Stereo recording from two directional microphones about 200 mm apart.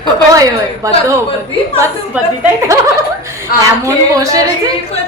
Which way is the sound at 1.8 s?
10° right (ahead or behind).